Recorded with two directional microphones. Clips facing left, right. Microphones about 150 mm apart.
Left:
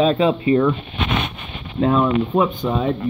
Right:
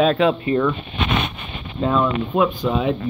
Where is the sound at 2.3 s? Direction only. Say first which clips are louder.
Even; 25° left (ahead or behind).